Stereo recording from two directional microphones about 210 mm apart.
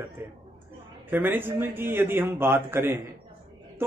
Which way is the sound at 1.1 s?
10° right (ahead or behind).